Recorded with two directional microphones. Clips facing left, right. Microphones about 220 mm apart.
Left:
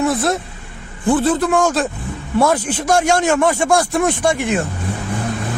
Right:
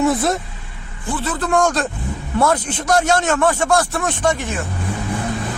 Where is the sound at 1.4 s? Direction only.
5° left (ahead or behind).